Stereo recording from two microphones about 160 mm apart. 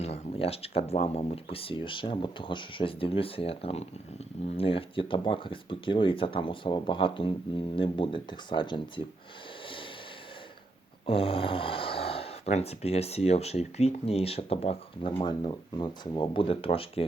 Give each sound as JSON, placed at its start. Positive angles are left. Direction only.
{"t": 0.0, "sound": "speech", "side_deg": 40}
{"t": 11.0, "sound": "speech", "side_deg": 35}